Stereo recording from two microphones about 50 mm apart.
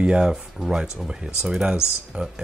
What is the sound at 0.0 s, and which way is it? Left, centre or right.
Speech, centre.